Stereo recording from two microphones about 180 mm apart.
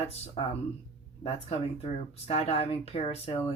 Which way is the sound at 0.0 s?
35° left (ahead or behind).